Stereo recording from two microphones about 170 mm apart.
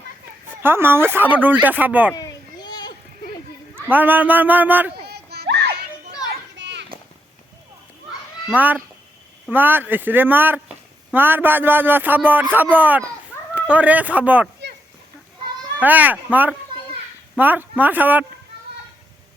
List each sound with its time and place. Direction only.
0.5 s a man's voice: 15° right (ahead or behind)
2.1 s children playing: 25° left (ahead or behind)
3.8 s a man's voice: 10° right (ahead or behind)
5.0 s a sound: 75° right (ahead or behind)
6.6 s children playing: 90° right
8.4 s a man's voice: 10° right (ahead or behind)
15.8 s a man's voice: 10° right (ahead or behind)